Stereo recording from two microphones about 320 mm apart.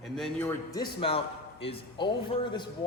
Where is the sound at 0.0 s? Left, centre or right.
Centre.